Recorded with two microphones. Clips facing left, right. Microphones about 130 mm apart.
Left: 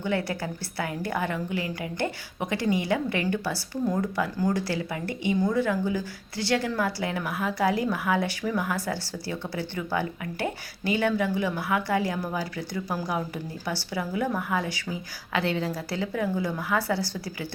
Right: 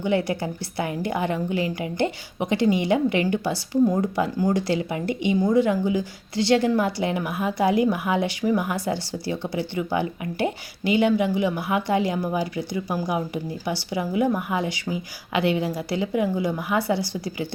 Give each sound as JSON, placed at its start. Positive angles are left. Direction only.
{"t": 0.0, "sound": "speech", "side_deg": -20}